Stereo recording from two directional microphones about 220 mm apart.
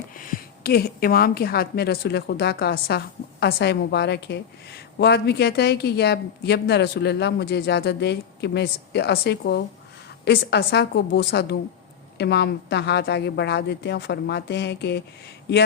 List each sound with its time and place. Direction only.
0.2 s a woman's voice: 40° left (ahead or behind)